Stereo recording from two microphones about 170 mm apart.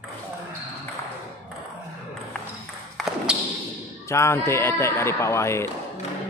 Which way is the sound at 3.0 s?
Centre (ahead or behind).